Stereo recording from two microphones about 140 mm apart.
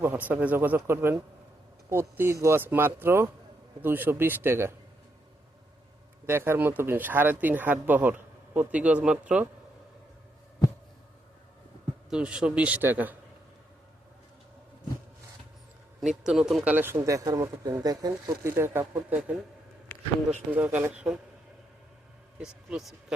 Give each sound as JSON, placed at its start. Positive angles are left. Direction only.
{"t": 0.0, "sound": "speech", "side_deg": -10}
{"t": 6.2, "sound": "speech", "side_deg": -15}
{"t": 12.1, "sound": "speech", "side_deg": -5}
{"t": 16.0, "sound": "speech", "side_deg": -5}
{"t": 20.5, "sound": "speech", "side_deg": -10}
{"t": 22.4, "sound": "a man's voice", "side_deg": -5}